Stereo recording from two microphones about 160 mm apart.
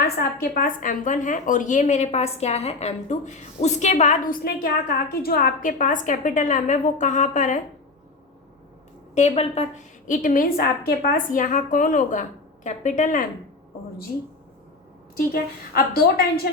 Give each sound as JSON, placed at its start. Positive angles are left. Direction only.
{"t": 0.0, "sound": "a woman's voice", "side_deg": 70}
{"t": 4.4, "sound": "a woman's voice", "side_deg": 70}
{"t": 9.1, "sound": "a woman's voice", "side_deg": 40}
{"t": 15.3, "sound": "a woman's voice", "side_deg": 70}